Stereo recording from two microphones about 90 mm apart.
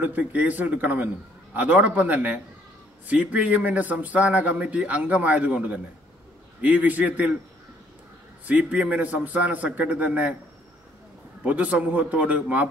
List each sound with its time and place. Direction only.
0.0 s a man's voice: 15° right (ahead or behind)
8.5 s a man's voice: 15° right (ahead or behind)
11.4 s a man's voice: 15° right (ahead or behind)